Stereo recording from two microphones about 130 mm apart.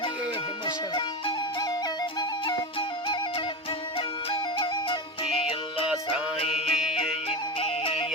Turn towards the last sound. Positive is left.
turn(degrees=45)  # may be behind; listen again after turning